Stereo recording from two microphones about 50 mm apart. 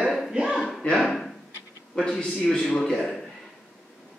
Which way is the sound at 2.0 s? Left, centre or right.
Centre.